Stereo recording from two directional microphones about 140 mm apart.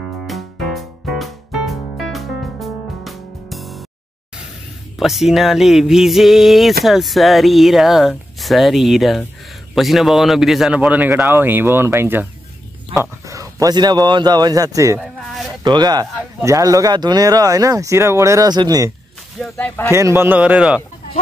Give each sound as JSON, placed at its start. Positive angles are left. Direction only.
{"t": 0.3, "sound": "music", "side_deg": 0}
{"t": 4.9, "sound": "a man's voice", "side_deg": 0}
{"t": 15.0, "sound": "a sound", "side_deg": 0}
{"t": 15.6, "sound": "speech", "side_deg": -30}
{"t": 19.4, "sound": "speech", "side_deg": 10}
{"t": 19.9, "sound": "a man's voice", "side_deg": -20}